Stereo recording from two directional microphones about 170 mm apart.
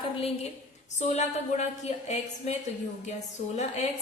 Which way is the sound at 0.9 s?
45° left (ahead or behind).